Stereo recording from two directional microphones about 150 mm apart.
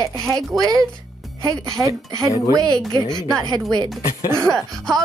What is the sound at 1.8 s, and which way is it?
Speech, 10° right (ahead or behind).